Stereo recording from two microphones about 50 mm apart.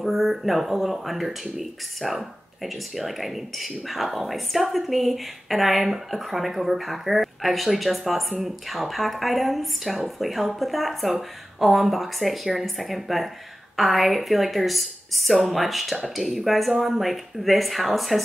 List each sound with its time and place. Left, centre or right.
0.0 s speech: centre